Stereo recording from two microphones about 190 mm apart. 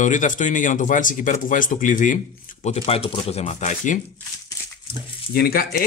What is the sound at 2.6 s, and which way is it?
Speech, 30° left (ahead or behind).